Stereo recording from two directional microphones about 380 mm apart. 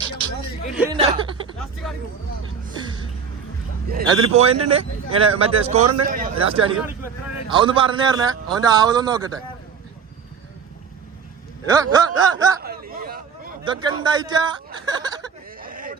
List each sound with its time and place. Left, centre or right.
0.8 s speech: centre
1.5 s a sound: centre
3.8 s speech: centre
5.8 s a man's voice: right
6.1 s speech: centre
11.6 s speech: centre
12.6 s hubbub: right
13.7 s speech: centre
15.6 s a sound: right